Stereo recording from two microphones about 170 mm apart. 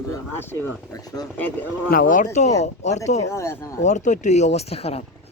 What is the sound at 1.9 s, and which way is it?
Speech, 55° left (ahead or behind).